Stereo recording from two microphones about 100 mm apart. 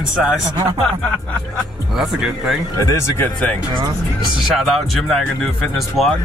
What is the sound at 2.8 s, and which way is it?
Speech, 35° left (ahead or behind).